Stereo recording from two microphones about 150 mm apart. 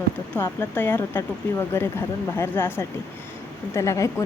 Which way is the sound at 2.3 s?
15° left (ahead or behind).